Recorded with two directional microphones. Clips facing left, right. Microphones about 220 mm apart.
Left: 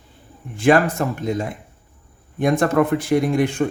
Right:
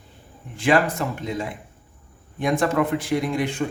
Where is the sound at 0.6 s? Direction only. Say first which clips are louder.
Left 4 dB; 50° left (ahead or behind).